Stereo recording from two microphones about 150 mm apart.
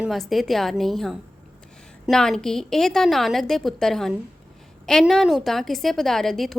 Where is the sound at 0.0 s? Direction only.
Centre (ahead or behind).